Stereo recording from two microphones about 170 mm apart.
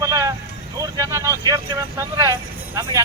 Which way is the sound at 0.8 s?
20° right (ahead or behind).